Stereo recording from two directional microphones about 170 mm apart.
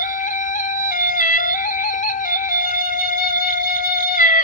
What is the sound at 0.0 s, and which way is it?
Music, 50° left (ahead or behind).